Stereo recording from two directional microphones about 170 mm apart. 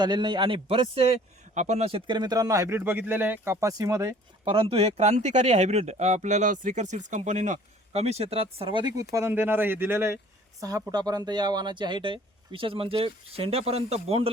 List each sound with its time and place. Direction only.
0.0 s a man's voice: 25° right (ahead or behind)
4.5 s a man's voice: 35° right (ahead or behind)